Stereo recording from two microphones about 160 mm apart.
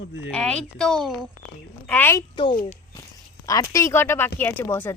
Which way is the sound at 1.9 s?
10° left (ahead or behind).